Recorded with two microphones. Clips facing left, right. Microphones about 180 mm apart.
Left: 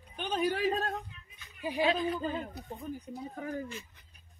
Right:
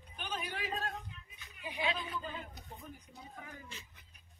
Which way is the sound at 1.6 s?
40° left (ahead or behind).